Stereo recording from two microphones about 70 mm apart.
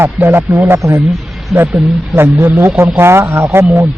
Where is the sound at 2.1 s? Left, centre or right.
Right.